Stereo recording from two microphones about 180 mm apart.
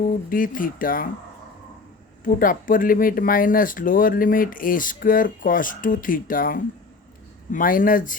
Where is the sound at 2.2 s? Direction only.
50° left (ahead or behind).